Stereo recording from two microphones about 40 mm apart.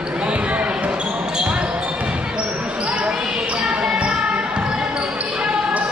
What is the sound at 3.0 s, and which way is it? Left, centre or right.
Basketball bounce, centre.